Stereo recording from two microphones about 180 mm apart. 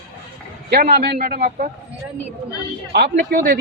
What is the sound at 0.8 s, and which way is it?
Speech, 60° right (ahead or behind).